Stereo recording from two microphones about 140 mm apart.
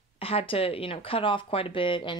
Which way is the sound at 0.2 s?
45° left (ahead or behind).